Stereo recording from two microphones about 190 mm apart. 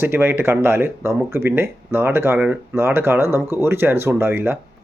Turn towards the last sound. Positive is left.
turn(degrees=-10)  # may be behind; listen again after turning